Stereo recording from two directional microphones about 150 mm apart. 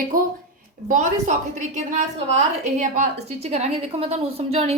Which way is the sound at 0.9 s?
60° right (ahead or behind).